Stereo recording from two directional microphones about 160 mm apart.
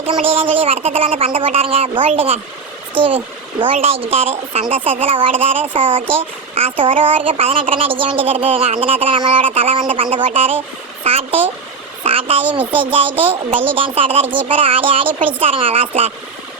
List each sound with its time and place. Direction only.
0.0 s a child's voice: 35° right (ahead or behind)